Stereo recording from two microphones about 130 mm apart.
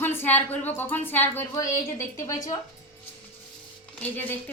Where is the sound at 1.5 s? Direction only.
25° left (ahead or behind).